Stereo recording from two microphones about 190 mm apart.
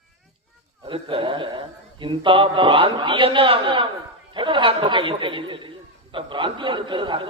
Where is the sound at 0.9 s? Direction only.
25° right (ahead or behind).